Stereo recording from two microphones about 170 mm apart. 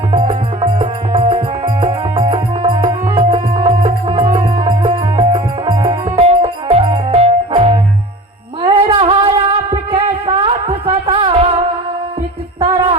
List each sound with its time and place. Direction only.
0.1 s music: 30° right (ahead or behind)